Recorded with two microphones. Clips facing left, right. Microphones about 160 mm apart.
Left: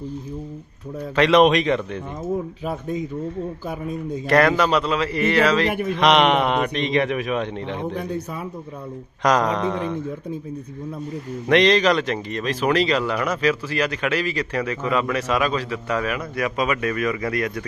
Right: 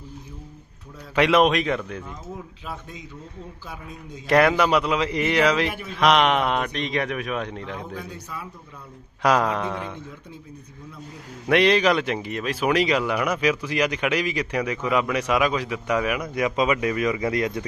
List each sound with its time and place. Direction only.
1.1 s a man's voice: 10° right (ahead or behind)
3.7 s a man's voice: 50° left (ahead or behind)
4.3 s speech: 10° right (ahead or behind)
6.0 s a man's voice: centre (ahead or behind)
7.9 s speech: 60° left (ahead or behind)
9.2 s speech: 10° right (ahead or behind)
11.4 s speech: 10° right (ahead or behind)